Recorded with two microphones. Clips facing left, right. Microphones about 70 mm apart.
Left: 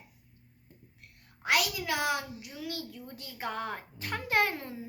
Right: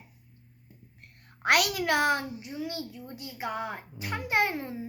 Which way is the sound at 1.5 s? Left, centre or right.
Right.